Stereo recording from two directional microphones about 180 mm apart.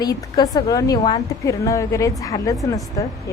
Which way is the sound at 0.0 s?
20° left (ahead or behind).